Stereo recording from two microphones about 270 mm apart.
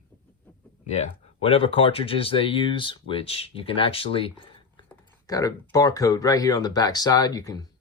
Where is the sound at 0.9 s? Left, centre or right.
Left.